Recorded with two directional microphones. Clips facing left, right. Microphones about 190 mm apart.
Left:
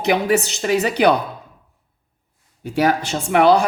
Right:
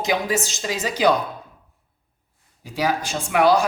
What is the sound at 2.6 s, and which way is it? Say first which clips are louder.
Speech: left 5 dB; 65° left (ahead or behind).